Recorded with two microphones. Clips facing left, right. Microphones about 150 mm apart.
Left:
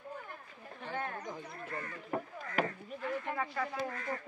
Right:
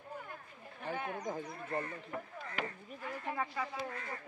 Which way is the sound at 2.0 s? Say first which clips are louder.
Left 5 dB; 45° left (ahead or behind).